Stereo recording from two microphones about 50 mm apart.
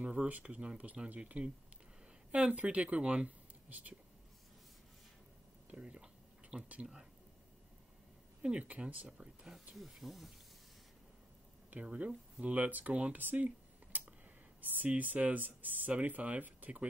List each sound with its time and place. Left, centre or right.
0.0 s speech: right
5.7 s speech: right
8.4 s speech: right
9.8 s speech: centre
11.7 s speech: right
13.9 s a sound: right
14.6 s speech: right